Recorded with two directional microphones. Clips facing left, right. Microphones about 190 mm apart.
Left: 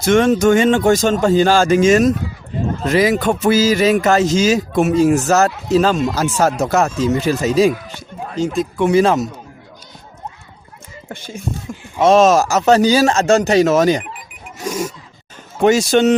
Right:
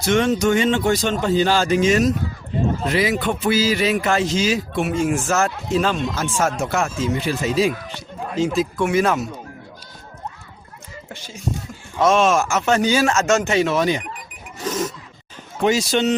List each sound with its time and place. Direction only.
0.0 s speech: 50° left (ahead or behind)
8.4 s speech: centre (ahead or behind)
8.9 s speech: 30° left (ahead or behind)
11.1 s speech: 55° left (ahead or behind)
12.0 s speech: 40° left (ahead or behind)
14.6 s zipper: 10° left (ahead or behind)
15.6 s speech: 45° left (ahead or behind)